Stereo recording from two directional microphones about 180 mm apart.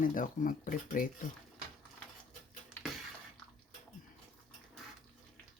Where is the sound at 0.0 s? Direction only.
50° left (ahead or behind).